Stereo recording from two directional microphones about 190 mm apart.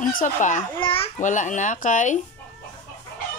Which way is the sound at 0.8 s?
30° left (ahead or behind).